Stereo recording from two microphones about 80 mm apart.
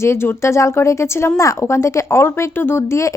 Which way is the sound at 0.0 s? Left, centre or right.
Left.